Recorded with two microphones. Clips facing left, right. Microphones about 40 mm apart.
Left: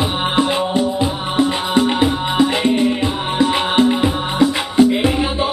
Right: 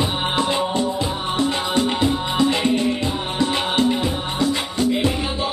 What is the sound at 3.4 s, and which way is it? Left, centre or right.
Music, left.